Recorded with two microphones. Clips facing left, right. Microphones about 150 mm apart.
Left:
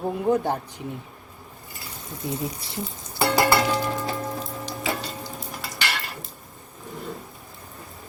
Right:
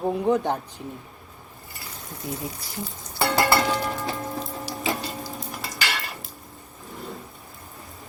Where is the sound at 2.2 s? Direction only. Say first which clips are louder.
Left 3 dB; 25° left (ahead or behind).